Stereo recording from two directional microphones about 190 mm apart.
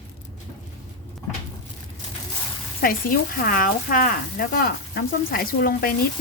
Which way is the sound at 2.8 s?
50° left (ahead or behind).